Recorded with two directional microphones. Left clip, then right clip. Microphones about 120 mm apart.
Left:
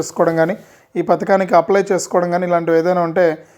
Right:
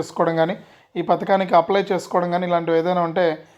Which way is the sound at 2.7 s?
20° left (ahead or behind).